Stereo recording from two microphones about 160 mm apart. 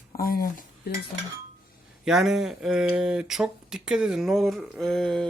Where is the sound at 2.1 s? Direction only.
Centre (ahead or behind).